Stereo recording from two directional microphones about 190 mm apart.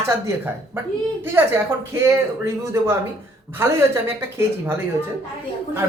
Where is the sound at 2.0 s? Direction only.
15° right (ahead or behind).